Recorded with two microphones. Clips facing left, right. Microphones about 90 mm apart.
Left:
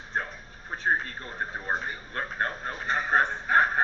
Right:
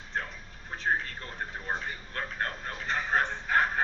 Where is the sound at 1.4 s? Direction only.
35° left (ahead or behind).